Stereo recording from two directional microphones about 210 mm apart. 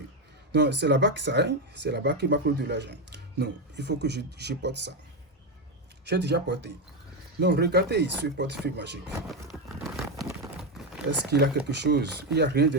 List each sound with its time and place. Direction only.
0.5 s speech: 55° right (ahead or behind)
6.1 s speech: 55° right (ahead or behind)
9.5 s horse: centre (ahead or behind)
10.2 s a sound: 5° right (ahead or behind)
11.3 s speech: 50° right (ahead or behind)